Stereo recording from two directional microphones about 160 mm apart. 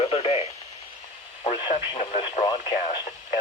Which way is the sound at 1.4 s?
35° left (ahead or behind).